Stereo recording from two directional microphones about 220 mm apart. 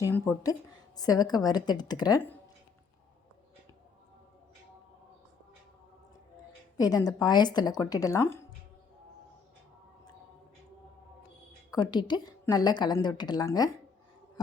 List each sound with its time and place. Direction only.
0.0 s a woman's voice: 10° left (ahead or behind)
6.7 s a woman's voice: 15° left (ahead or behind)
11.7 s a woman's voice: 20° left (ahead or behind)